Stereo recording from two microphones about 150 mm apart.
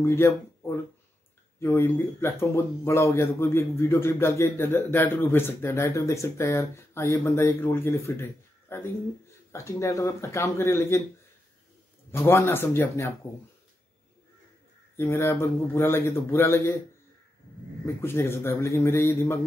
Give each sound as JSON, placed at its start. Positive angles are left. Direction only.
{"t": 0.0, "sound": "speech", "side_deg": 15}
{"t": 12.1, "sound": "speech", "side_deg": 15}
{"t": 15.0, "sound": "speech", "side_deg": 15}
{"t": 17.8, "sound": "speech", "side_deg": 15}